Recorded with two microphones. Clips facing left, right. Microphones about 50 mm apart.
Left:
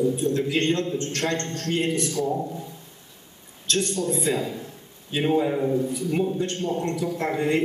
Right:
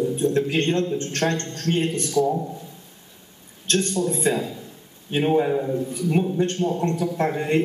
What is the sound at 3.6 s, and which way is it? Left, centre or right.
Speech, right.